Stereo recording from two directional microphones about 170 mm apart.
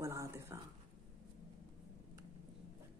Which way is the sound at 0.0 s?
15° right (ahead or behind).